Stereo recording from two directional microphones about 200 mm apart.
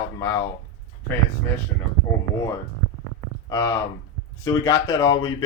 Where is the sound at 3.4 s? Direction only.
20° left (ahead or behind).